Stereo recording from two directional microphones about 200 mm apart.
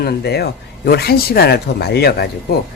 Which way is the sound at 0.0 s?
55° left (ahead or behind).